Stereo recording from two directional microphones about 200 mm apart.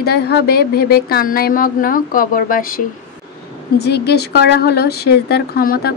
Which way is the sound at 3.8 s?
55° left (ahead or behind).